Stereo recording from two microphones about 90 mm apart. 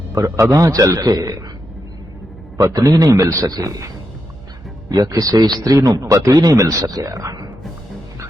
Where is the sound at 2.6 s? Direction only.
40° right (ahead or behind).